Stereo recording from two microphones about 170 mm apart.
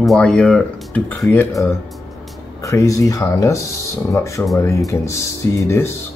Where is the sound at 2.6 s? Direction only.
20° left (ahead or behind).